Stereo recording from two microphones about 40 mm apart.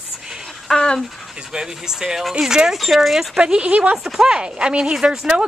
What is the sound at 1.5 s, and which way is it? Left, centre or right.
Speech, centre.